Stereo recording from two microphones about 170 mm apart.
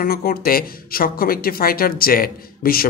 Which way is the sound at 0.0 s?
60° left (ahead or behind).